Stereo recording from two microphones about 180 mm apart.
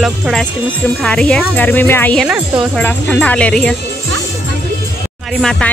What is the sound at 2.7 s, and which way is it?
Speech, 10° left (ahead or behind).